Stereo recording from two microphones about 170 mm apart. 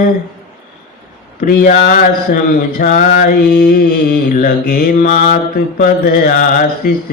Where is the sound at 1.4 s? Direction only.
55° left (ahead or behind).